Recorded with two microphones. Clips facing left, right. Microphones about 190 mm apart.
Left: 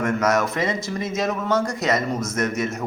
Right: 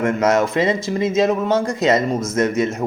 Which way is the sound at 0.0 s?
20° right (ahead or behind).